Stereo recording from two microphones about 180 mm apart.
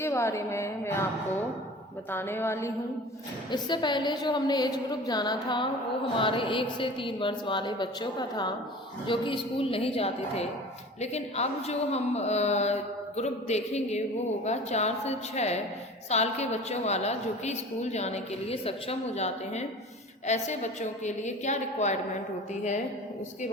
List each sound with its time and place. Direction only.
0.0 s a woman's voice: 15° left (ahead or behind)
2.0 s a woman's voice: 10° left (ahead or behind)
3.5 s a woman's voice: 25° left (ahead or behind); by 21.9 s 40° left (ahead or behind)